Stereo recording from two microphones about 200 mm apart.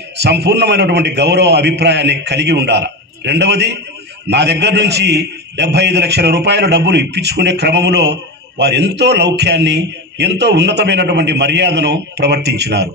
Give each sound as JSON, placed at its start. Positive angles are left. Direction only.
{"t": 0.2, "sound": "a man's voice", "side_deg": -55}